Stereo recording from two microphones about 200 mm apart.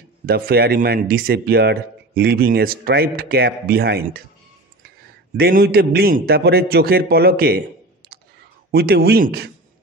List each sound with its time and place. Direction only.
0.3 s speech: 50° right (ahead or behind)
8.7 s speech: 50° right (ahead or behind)